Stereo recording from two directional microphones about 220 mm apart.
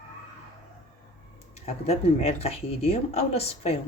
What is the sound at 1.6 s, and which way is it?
Speech, 25° left (ahead or behind).